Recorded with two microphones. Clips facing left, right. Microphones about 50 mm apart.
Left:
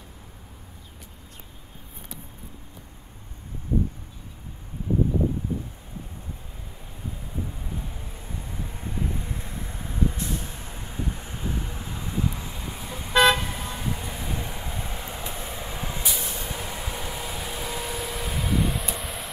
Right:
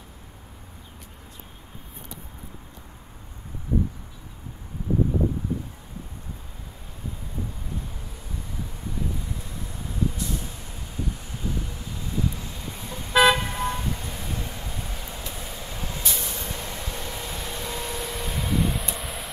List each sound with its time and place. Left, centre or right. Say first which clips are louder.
8.8 s vehicle: left 1 dB; left; by 16.1 s centre
16.1 s vehicle: even; centre